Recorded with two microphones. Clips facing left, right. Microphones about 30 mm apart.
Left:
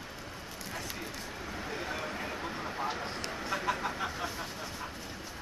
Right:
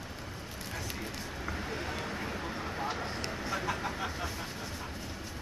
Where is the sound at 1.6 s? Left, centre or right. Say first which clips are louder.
Left 3 dB; centre.